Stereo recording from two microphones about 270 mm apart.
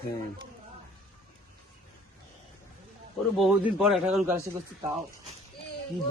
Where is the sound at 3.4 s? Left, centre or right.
Centre.